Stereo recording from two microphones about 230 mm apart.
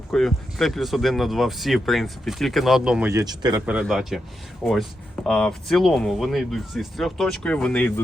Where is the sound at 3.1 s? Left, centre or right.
Centre.